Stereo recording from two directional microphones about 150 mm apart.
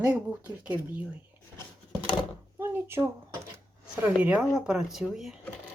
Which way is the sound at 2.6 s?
15° right (ahead or behind).